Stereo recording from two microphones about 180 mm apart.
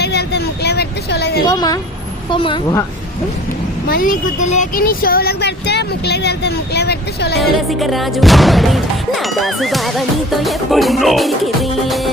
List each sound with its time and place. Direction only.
0.0 s a sound: 65° left (ahead or behind)
1.5 s a woman's voice: 20° left (ahead or behind)
3.8 s speech: 50° left (ahead or behind); by 7.3 s 65° left (ahead or behind)
7.4 s music: centre (ahead or behind)